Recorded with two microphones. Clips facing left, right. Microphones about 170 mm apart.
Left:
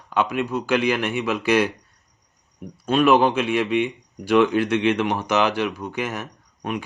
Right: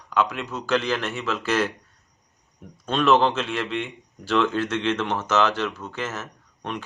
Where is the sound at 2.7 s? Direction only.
10° left (ahead or behind).